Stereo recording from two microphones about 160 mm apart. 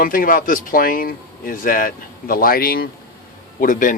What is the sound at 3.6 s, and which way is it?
Speech, 55° left (ahead or behind).